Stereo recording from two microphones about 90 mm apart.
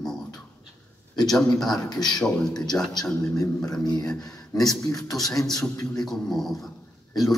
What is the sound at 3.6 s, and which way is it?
Beatboxing, 5° left (ahead or behind).